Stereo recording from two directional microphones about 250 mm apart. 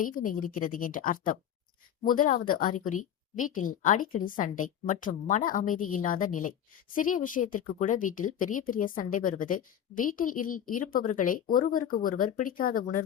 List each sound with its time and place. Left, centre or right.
0.0 s a woman's voice: left